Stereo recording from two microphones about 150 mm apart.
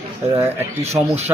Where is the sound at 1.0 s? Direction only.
25° right (ahead or behind).